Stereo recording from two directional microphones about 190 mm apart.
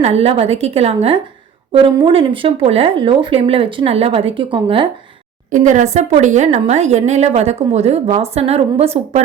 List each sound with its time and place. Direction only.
0.0 s speech: 35° right (ahead or behind)
5.5 s speech: 40° right (ahead or behind)